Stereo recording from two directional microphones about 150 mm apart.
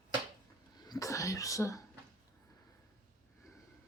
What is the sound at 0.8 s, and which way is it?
Speech, 25° left (ahead or behind).